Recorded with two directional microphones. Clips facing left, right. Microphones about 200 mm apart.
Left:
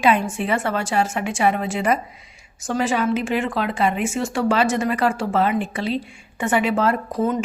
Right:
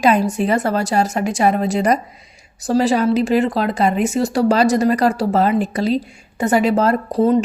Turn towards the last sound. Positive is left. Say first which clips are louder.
# right 6 dB
turn(degrees=-35)  # may be behind; listen again after turning